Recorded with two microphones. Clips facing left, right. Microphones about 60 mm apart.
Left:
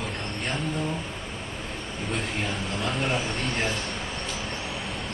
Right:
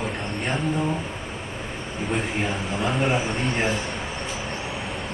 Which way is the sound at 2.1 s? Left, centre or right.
Centre.